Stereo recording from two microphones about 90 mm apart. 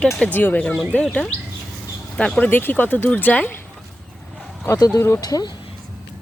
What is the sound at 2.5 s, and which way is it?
Speech, 20° left (ahead or behind).